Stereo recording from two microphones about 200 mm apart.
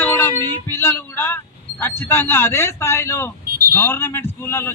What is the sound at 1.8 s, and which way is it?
A man's voice, 10° left (ahead or behind).